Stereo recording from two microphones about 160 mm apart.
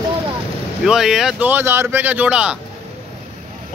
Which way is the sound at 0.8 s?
5° right (ahead or behind).